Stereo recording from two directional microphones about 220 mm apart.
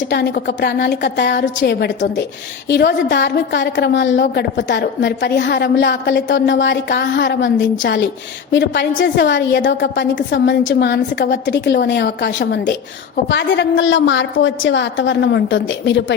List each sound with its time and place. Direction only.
0.1 s a woman's voice: 50° left (ahead or behind)